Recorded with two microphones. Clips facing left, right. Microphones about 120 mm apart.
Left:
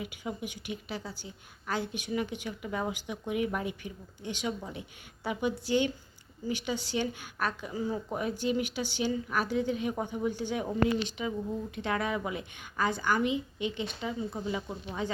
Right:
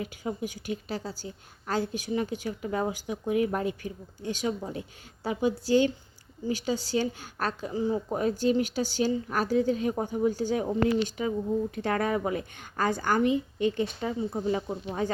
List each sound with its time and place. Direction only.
0.2 s speech: 40° right (ahead or behind)